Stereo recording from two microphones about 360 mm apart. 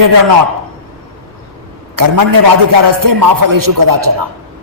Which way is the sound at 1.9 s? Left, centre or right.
Right.